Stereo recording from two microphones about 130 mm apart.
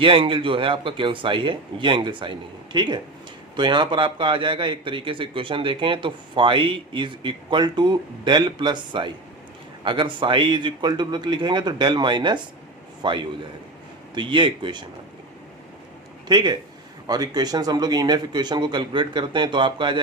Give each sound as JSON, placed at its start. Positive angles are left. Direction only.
{"t": 0.0, "sound": "a man's voice", "side_deg": -40}
{"t": 16.3, "sound": "a man's voice", "side_deg": -35}